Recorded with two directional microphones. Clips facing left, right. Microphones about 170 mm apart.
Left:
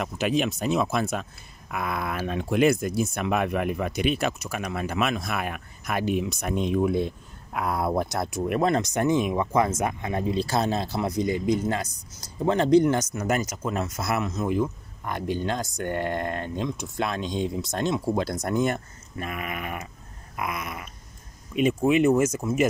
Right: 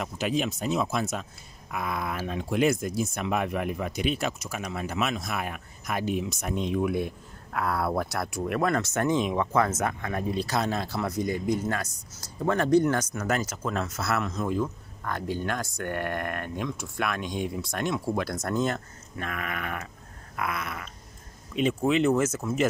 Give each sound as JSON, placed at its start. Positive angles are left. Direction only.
{"t": 0.0, "sound": "speech", "side_deg": 65}
{"t": 6.8, "sound": "speech", "side_deg": 25}
{"t": 10.3, "sound": "speech", "side_deg": 30}
{"t": 13.1, "sound": "speech", "side_deg": 10}